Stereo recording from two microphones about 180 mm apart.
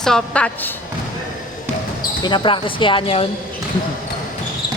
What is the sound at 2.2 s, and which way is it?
Speech, 25° left (ahead or behind).